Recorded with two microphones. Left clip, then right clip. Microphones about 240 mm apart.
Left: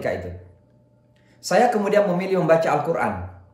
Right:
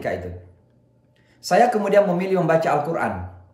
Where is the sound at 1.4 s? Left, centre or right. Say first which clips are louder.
Right 1 dB; centre.